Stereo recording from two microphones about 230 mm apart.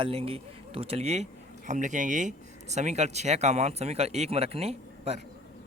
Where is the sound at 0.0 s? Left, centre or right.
Right.